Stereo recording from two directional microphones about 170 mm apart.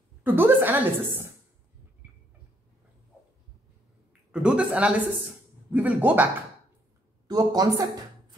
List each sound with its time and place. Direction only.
0.2 s a woman's voice: 10° right (ahead or behind)
4.3 s a woman's voice: 5° right (ahead or behind)
7.2 s a woman's voice: 20° right (ahead or behind)